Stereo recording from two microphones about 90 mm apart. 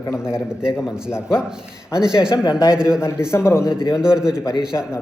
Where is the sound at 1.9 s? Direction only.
10° right (ahead or behind).